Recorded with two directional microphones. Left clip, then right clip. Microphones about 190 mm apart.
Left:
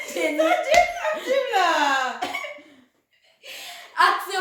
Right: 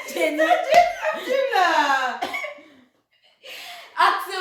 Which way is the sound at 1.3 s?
20° left (ahead or behind).